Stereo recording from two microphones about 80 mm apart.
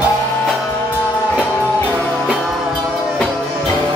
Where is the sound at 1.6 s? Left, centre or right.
Left.